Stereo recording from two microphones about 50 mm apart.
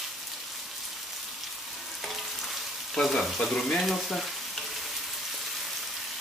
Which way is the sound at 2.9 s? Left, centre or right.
Centre.